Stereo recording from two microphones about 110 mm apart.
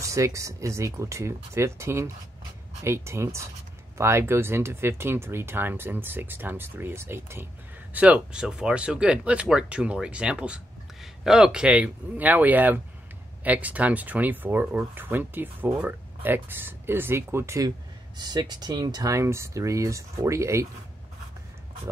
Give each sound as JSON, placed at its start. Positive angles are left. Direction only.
{"t": 0.0, "sound": "speech", "side_deg": -30}
{"t": 7.9, "sound": "speech", "side_deg": -10}
{"t": 17.6, "sound": "speech", "side_deg": -40}